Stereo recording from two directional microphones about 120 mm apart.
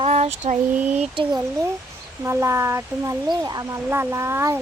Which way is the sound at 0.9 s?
45° right (ahead or behind).